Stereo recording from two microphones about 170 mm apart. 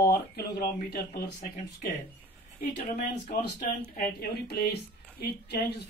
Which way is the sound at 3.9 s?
60° left (ahead or behind).